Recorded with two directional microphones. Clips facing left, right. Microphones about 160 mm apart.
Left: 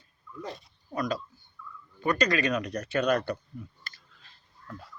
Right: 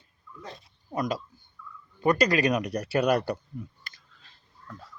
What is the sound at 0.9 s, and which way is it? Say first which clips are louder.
Speech: right 1 dB; 20° right (ahead or behind).